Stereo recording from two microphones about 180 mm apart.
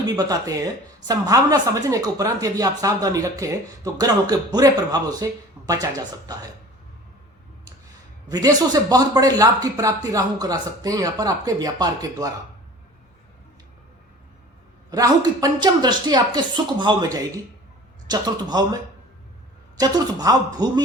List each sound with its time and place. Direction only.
0.0 s a woman's voice: 20° right (ahead or behind)
8.3 s a woman's voice: 20° right (ahead or behind)
14.8 s a woman's voice: 20° right (ahead or behind)